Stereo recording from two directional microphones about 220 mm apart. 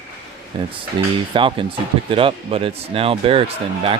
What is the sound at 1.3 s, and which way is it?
Speech, 25° right (ahead or behind).